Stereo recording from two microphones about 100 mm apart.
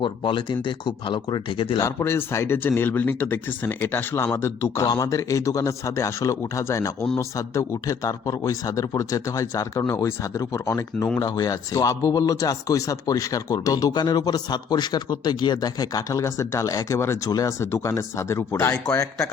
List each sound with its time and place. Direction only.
0.0 s speech: 55° left (ahead or behind)
1.8 s speech: 25° left (ahead or behind)